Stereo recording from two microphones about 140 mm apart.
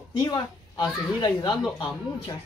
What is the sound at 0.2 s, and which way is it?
Speech, 30° left (ahead or behind).